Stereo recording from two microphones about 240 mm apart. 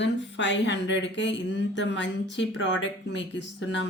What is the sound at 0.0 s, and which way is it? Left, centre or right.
Speech, left.